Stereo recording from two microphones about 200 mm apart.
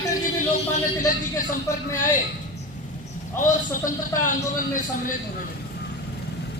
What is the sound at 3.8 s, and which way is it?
Speech, 40° left (ahead or behind).